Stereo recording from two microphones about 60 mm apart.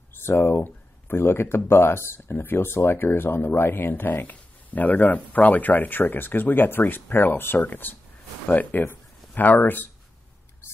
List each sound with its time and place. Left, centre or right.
0.4 s speech: left